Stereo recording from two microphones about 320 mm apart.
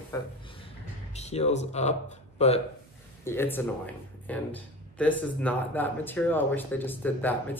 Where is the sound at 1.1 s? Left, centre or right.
Centre.